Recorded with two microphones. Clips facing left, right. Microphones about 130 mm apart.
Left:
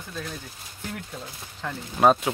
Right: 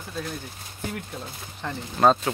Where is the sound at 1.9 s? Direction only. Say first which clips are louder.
Even; 10° left (ahead or behind).